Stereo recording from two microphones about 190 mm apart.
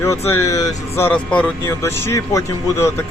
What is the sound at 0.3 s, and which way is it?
Speech, 15° left (ahead or behind).